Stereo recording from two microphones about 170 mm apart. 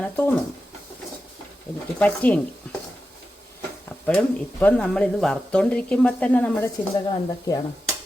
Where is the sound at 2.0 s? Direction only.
10° left (ahead or behind).